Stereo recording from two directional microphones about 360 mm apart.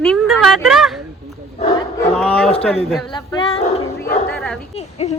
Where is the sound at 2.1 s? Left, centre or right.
Centre.